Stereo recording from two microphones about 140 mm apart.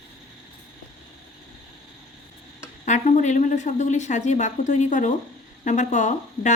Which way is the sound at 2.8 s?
60° left (ahead or behind).